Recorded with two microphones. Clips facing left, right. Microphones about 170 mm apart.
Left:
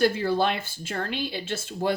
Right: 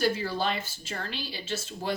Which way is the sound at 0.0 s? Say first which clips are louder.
Left 5 dB; 55° left (ahead or behind).